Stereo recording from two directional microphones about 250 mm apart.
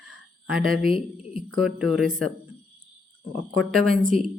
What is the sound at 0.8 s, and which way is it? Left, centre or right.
Speech, left.